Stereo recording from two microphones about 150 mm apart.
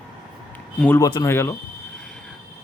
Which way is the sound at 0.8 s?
15° left (ahead or behind).